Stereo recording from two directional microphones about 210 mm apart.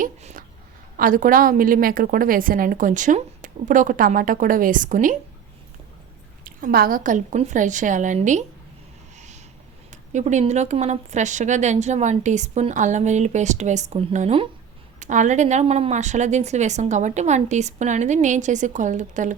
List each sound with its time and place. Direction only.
0.0 s a woman's voice: 35° right (ahead or behind)
6.4 s a woman's voice: 45° right (ahead or behind)
9.1 s vehicle: 35° right (ahead or behind)
9.9 s a woman's voice: 35° right (ahead or behind)